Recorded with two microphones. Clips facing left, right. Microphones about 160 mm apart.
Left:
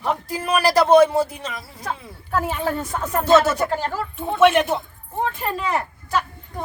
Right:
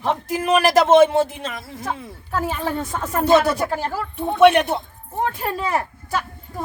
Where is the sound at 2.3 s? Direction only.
Centre (ahead or behind).